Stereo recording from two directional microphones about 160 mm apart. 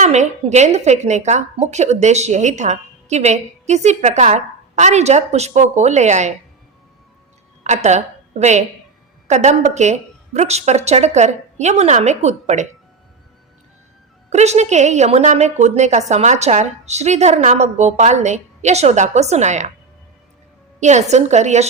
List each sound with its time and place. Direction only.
0.0 s a woman's voice: 45° right (ahead or behind)
7.6 s a woman's voice: 45° right (ahead or behind)
14.3 s a woman's voice: 45° right (ahead or behind)
20.8 s a woman's voice: 45° right (ahead or behind)